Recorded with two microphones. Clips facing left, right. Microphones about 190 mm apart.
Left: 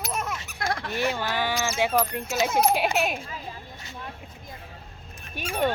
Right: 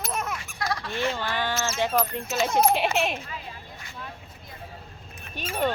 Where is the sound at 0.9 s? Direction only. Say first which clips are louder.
Left 2 dB; 15° left (ahead or behind).